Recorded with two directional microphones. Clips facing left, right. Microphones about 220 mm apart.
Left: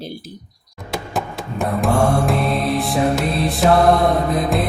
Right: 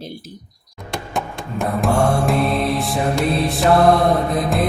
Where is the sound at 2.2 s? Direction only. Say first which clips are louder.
Right 1 dB; centre (ahead or behind).